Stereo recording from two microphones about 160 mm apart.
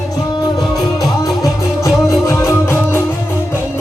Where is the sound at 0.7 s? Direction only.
20° left (ahead or behind).